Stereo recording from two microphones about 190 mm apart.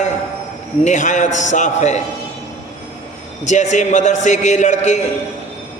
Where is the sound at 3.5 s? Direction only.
40° left (ahead or behind).